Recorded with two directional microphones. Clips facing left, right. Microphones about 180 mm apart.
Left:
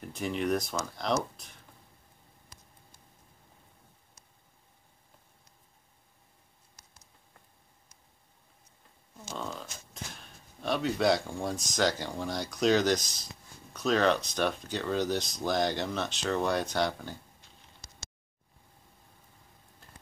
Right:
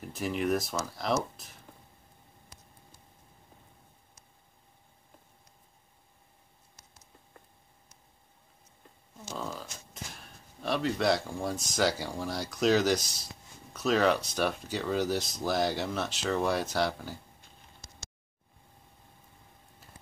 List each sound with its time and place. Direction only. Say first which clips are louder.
0.0 s speech: right 1 dB; centre (ahead or behind)
9.2 s a sound: even; 5° right (ahead or behind)
10.1 s speech: right 1 dB; centre (ahead or behind)
19.8 s music: even; 5° right (ahead or behind)